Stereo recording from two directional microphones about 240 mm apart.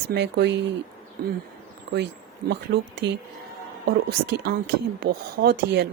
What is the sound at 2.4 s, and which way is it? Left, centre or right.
Speech, right.